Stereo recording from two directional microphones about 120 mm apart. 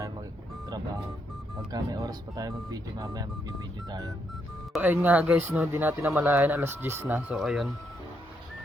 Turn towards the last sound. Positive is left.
turn(degrees=0)  # may be behind; listen again after turning